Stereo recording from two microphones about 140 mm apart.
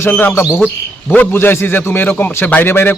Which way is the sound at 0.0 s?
15° left (ahead or behind).